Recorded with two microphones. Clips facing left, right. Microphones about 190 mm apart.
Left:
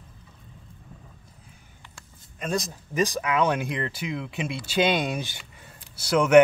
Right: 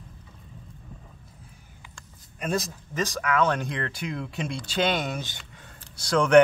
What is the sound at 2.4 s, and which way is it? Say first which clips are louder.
Speech: even; centre (ahead or behind).